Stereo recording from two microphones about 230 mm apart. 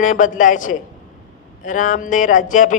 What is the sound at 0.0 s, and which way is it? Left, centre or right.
Speech, left.